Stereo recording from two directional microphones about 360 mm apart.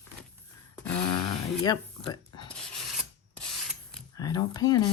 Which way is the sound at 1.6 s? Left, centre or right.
Centre.